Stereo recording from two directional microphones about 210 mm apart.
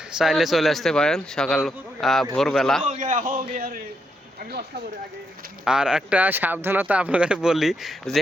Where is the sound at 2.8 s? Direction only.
35° right (ahead or behind).